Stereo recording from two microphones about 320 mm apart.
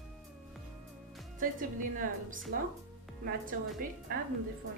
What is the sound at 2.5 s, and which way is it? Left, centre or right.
A woman's voice, right.